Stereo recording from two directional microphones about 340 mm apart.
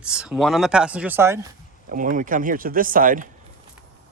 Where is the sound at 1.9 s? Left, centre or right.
Right.